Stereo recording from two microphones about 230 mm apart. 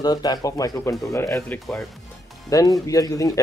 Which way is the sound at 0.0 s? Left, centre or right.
Centre.